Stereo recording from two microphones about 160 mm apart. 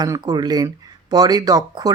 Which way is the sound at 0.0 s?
25° right (ahead or behind).